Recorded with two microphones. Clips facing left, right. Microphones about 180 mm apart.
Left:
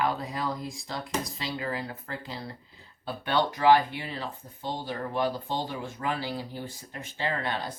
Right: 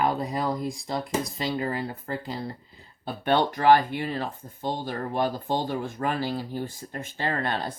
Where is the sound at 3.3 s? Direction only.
50° right (ahead or behind).